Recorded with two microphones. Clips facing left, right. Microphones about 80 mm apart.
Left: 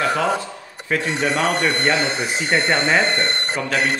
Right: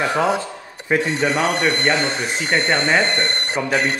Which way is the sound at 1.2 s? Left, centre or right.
Centre.